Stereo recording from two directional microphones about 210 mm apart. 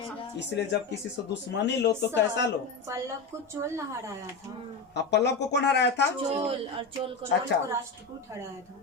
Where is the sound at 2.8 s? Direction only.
15° right (ahead or behind).